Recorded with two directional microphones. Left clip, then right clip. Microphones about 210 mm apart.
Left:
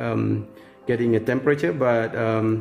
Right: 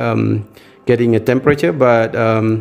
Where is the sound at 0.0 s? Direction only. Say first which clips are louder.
Right 8 dB; 35° right (ahead or behind).